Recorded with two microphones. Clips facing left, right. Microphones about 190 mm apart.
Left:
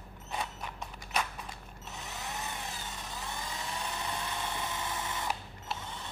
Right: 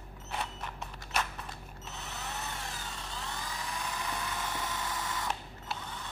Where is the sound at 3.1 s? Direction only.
20° left (ahead or behind).